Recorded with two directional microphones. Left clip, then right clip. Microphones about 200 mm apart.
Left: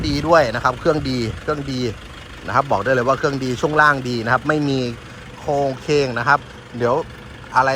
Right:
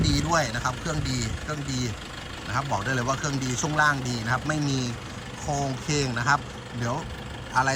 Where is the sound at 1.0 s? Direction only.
35° left (ahead or behind).